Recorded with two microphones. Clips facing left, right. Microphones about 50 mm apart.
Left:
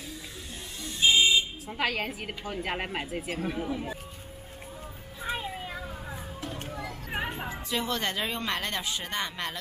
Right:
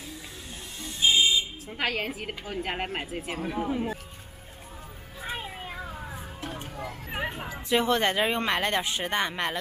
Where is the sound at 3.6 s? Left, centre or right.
Right.